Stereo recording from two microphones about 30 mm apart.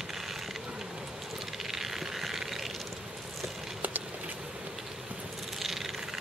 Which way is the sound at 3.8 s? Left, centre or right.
Right.